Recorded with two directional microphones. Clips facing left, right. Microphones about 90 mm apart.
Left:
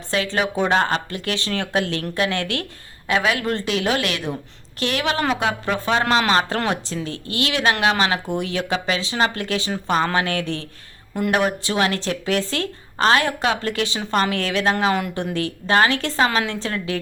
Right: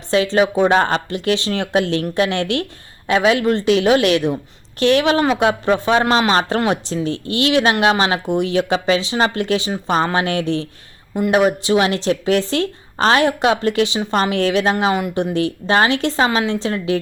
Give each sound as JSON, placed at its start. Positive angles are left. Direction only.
{"t": 0.1, "sound": "speech", "side_deg": -25}